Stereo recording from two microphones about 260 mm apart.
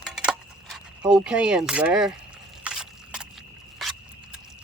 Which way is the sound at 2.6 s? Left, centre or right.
Centre.